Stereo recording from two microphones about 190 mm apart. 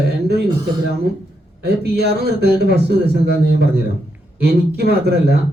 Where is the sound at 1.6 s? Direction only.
60° right (ahead or behind).